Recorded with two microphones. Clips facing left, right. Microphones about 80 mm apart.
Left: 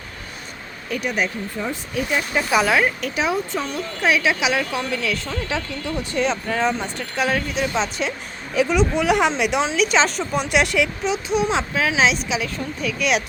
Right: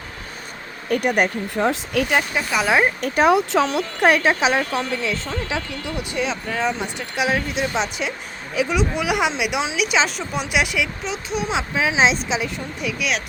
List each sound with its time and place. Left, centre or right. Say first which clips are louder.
0.9 s speech: right 5 dB; right
2.3 s speech: left 3 dB; centre
2.6 s speech: right 1 dB; right
3.0 s speech: right 6 dB; right
3.3 s speech: right 6 dB; right
4.0 s speech: right 3 dB; right; by 6.8 s centre
7.0 s speech: right 1 dB; centre
11.7 s speech: right 1 dB; centre
13.0 s speech: left 5 dB; centre